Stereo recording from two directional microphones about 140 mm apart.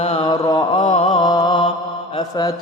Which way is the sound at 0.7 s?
50° left (ahead or behind).